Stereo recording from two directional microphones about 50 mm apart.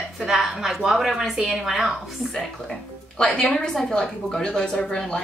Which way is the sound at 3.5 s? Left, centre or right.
Centre.